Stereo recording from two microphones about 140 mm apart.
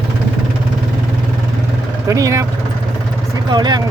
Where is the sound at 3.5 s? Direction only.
30° right (ahead or behind).